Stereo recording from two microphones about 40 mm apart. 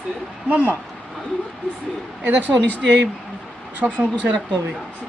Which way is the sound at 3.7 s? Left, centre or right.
Right.